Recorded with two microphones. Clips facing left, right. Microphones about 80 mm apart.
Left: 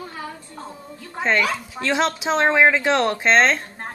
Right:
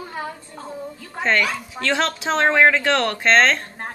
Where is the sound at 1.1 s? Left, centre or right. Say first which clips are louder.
Even; centre.